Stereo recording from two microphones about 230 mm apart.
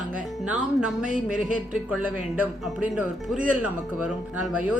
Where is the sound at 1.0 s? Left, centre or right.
Right.